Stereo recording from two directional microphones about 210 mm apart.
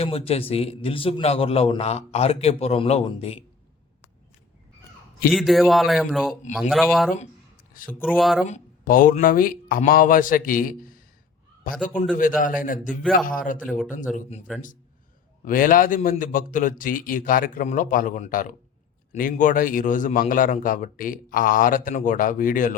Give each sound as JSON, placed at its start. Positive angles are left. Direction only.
{"t": 0.0, "sound": "a man's voice", "side_deg": 30}
{"t": 5.3, "sound": "speech", "side_deg": 0}
{"t": 8.4, "sound": "a man's voice", "side_deg": 40}
{"t": 12.4, "sound": "a man's voice", "side_deg": 40}
{"t": 12.9, "sound": "speech", "side_deg": 0}
{"t": 13.2, "sound": "a man's voice", "side_deg": 40}
{"t": 13.7, "sound": "speech", "side_deg": -5}
{"t": 15.4, "sound": "a man's voice", "side_deg": 40}